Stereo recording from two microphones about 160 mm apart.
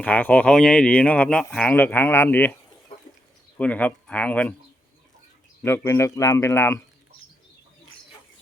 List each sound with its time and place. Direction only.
0.0 s speech: 10° left (ahead or behind)
3.6 s speech: 10° left (ahead or behind)
5.6 s speech: 15° left (ahead or behind)